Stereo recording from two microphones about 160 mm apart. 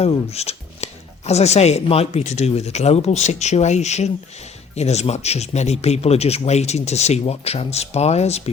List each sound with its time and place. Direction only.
0.0 s speech: 40° left (ahead or behind)